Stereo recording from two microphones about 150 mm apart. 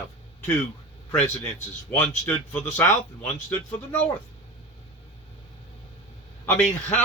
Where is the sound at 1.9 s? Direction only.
10° left (ahead or behind).